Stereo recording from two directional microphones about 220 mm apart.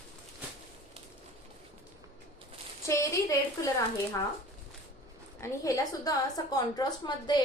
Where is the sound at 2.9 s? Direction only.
15° left (ahead or behind).